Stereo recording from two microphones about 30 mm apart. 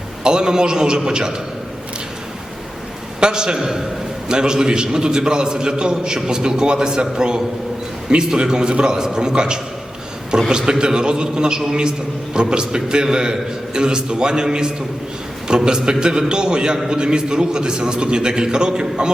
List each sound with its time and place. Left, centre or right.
0.2 s a man's voice: right
3.2 s a man's voice: right